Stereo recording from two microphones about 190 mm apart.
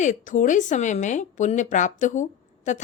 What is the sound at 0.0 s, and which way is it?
A woman's voice, 40° left (ahead or behind).